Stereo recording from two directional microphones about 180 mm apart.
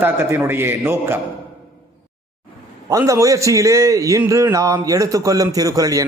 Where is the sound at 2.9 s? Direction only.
20° right (ahead or behind).